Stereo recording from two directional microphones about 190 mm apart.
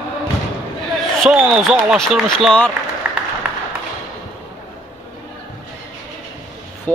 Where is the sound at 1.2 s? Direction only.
Centre (ahead or behind).